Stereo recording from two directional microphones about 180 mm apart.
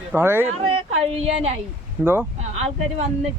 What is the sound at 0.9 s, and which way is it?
Speech, 35° right (ahead or behind).